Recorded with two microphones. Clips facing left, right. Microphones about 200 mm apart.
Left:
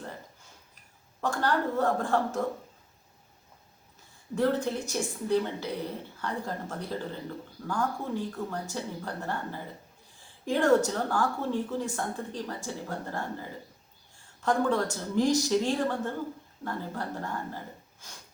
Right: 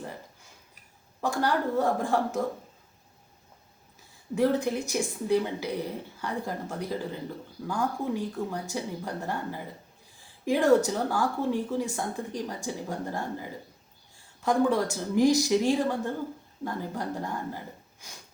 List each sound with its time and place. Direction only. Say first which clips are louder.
1.2 s speech: right 1 dB; 10° right (ahead or behind)
4.4 s speech: right 2 dB; 10° right (ahead or behind)